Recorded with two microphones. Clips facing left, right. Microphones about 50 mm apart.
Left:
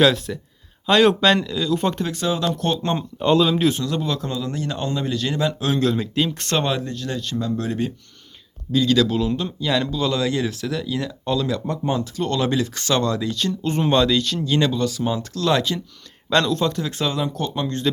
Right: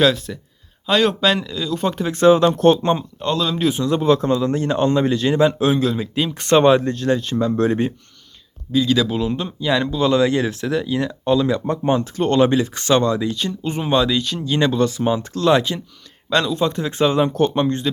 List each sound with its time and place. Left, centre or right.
0.0 s speech: centre
2.1 s a man's voice: right
3.2 s speech: centre
3.8 s a man's voice: right
5.7 s speech: centre
6.5 s a man's voice: right
8.7 s speech: centre
14.6 s speech: right
16.3 s speech: centre
16.7 s speech: right
17.2 s a man's voice: right